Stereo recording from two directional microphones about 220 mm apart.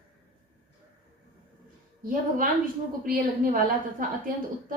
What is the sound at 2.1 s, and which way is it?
A woman's voice, 40° right (ahead or behind).